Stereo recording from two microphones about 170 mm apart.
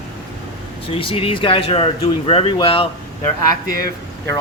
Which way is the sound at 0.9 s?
30° left (ahead or behind).